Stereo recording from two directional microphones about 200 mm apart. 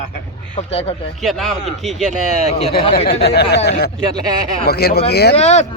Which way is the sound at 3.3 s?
55° left (ahead or behind).